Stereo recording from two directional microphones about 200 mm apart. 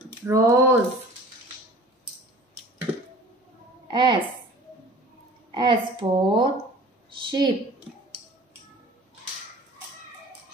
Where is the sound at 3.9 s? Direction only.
20° right (ahead or behind).